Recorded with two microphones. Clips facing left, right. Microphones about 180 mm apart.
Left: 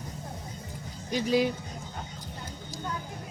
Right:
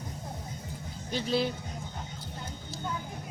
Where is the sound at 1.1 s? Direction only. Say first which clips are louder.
Left 4 dB; 10° left (ahead or behind).